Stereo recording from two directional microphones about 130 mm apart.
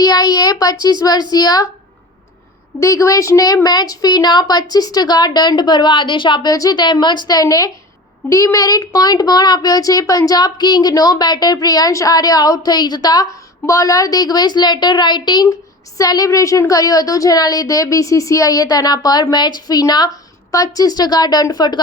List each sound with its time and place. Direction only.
0.0 s a sound: 30° left (ahead or behind)
0.6 s a woman's voice: 30° left (ahead or behind)
2.8 s a child's voice: 25° left (ahead or behind)